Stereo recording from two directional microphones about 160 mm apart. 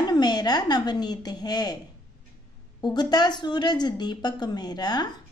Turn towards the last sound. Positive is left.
turn(degrees=25)  # may be behind; listen again after turning